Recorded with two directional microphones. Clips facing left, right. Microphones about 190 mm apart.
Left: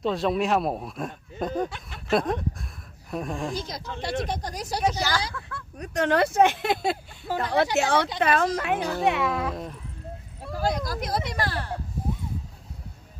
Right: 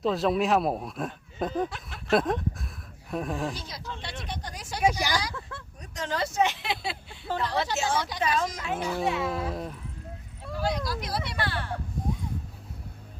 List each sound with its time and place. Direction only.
0.0 s speech: centre (ahead or behind)
3.7 s speech: 45° left (ahead or behind)
4.8 s a woman's voice: 10° right (ahead or behind)
5.8 s speech: 65° left (ahead or behind)
7.8 s speech: 65° left (ahead or behind)
9.5 s speech: centre (ahead or behind)
10.8 s speech: 45° left (ahead or behind)